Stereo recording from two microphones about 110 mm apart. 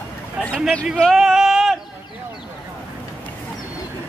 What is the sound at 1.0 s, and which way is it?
Male singing, centre (ahead or behind).